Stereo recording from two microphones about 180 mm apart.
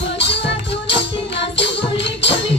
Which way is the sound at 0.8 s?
75° left (ahead or behind).